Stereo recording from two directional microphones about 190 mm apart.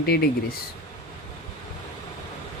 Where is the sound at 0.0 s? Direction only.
55° left (ahead or behind).